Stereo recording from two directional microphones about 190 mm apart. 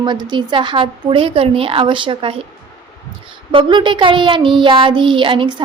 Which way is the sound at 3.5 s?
25° right (ahead or behind).